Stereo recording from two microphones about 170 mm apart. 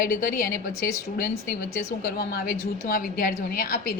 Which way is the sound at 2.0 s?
65° left (ahead or behind).